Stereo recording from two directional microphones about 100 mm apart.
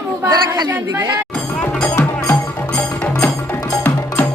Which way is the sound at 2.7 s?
10° left (ahead or behind).